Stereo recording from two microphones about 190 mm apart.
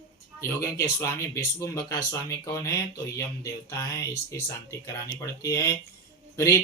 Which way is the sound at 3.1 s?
15° left (ahead or behind).